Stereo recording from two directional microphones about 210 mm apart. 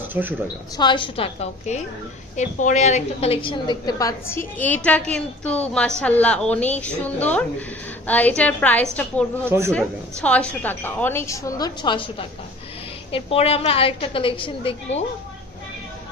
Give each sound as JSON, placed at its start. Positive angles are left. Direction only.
{"t": 0.1, "sound": "speech", "side_deg": -10}
{"t": 0.8, "sound": "a woman's voice", "side_deg": 20}
{"t": 9.5, "sound": "speech", "side_deg": -15}
{"t": 9.7, "sound": "a woman's voice", "side_deg": 5}